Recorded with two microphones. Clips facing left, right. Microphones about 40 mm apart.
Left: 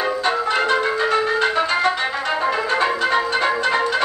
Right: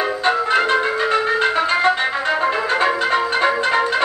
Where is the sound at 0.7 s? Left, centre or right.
Centre.